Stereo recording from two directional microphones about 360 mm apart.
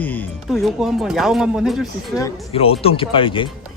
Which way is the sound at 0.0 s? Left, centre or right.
Centre.